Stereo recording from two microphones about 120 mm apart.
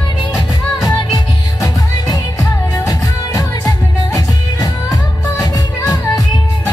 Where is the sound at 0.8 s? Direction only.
30° left (ahead or behind).